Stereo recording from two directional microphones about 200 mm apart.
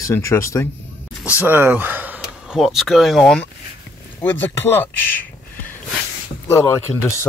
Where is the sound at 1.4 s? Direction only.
10° right (ahead or behind); by 5.2 s 10° left (ahead or behind).